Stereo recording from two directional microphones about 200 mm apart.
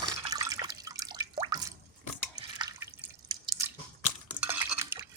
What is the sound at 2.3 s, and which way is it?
Drip, 20° right (ahead or behind).